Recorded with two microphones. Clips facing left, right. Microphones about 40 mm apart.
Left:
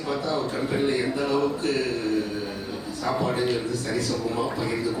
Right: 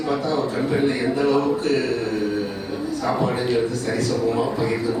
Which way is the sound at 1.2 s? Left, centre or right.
Centre.